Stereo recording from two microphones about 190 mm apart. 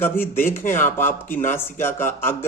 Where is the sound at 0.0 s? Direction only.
10° left (ahead or behind).